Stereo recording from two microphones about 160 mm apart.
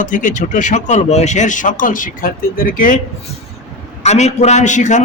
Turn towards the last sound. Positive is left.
turn(degrees=50)  # may be behind; listen again after turning